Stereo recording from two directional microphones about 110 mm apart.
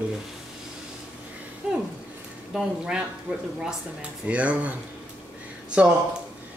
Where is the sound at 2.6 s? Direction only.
5° right (ahead or behind).